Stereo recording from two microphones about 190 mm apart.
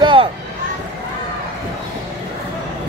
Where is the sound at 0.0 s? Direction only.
25° right (ahead or behind).